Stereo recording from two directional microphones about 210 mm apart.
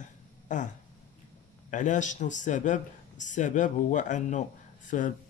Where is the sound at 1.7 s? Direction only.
35° left (ahead or behind).